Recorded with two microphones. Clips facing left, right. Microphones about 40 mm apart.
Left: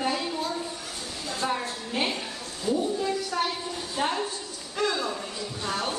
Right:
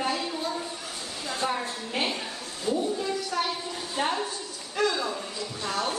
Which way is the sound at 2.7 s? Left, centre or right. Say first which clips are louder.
Left 1 dB; right.